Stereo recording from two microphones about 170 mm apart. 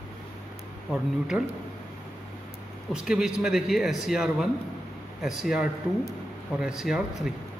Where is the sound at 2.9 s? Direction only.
5° right (ahead or behind).